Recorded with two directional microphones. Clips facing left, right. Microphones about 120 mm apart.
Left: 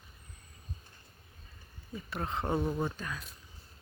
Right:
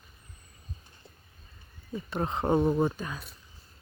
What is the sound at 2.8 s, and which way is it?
Speech, 20° right (ahead or behind).